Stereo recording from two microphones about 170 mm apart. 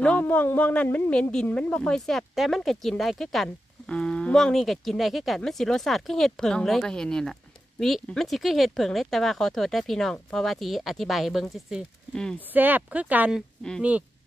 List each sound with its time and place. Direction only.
0.0 s speech: 10° left (ahead or behind)
12.5 s speech: 10° right (ahead or behind)